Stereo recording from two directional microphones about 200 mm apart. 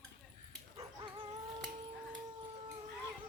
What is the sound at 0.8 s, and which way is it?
Dog, 25° right (ahead or behind).